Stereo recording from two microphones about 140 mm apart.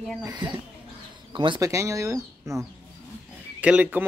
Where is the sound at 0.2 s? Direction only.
30° right (ahead or behind).